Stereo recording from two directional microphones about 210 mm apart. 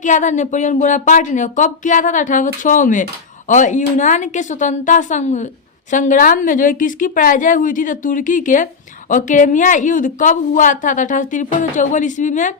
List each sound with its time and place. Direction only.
0.0 s a woman's voice: 35° left (ahead or behind)